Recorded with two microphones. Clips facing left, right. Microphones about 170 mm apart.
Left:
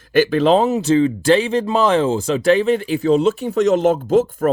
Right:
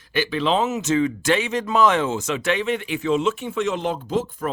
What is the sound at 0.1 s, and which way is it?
Speech, 45° left (ahead or behind).